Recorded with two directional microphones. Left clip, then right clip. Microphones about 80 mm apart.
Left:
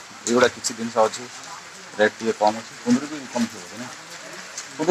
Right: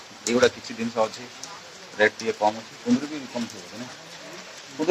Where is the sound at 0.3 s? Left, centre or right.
Left.